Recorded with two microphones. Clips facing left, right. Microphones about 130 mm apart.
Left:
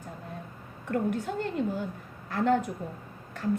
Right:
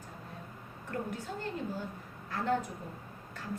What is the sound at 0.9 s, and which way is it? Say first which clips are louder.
A woman's voice: left 9 dB; 65° left (ahead or behind).